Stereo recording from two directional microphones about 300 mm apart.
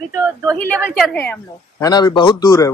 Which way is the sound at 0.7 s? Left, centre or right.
Centre.